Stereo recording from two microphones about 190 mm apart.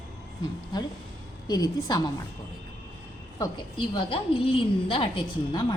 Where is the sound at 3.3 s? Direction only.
20° left (ahead or behind).